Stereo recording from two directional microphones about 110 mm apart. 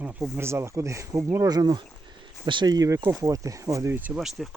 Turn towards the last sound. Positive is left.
turn(degrees=0)  # may be behind; listen again after turning